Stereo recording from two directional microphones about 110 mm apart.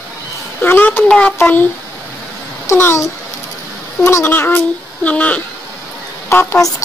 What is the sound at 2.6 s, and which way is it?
A woman's voice, 25° left (ahead or behind).